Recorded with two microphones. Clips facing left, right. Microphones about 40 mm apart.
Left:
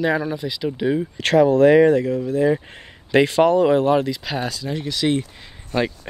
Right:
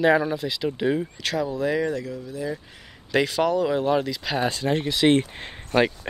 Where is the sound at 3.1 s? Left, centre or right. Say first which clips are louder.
Left 6 dB; left.